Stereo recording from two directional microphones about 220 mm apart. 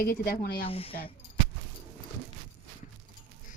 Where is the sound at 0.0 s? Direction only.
40° left (ahead or behind).